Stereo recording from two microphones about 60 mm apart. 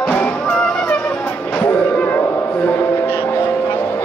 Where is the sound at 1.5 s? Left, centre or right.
Left.